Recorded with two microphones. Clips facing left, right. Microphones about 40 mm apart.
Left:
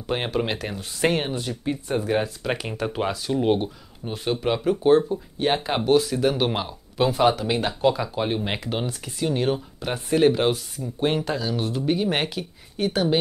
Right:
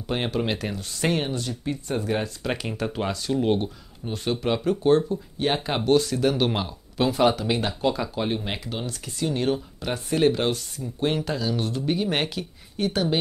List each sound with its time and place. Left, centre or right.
0.0 s speech: centre
8.5 s speech: left
9.0 s speech: centre